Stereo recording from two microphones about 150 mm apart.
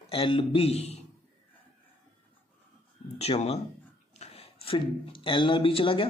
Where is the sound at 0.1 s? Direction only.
35° left (ahead or behind).